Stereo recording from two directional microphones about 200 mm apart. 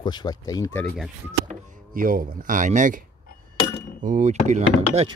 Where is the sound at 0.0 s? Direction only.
20° left (ahead or behind).